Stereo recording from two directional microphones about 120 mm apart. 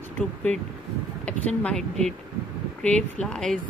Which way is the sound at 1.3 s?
10° left (ahead or behind).